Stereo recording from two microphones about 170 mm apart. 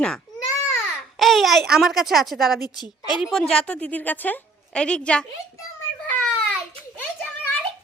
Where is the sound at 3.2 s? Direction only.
Centre (ahead or behind).